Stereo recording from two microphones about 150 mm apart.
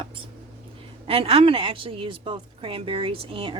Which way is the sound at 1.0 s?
40° right (ahead or behind).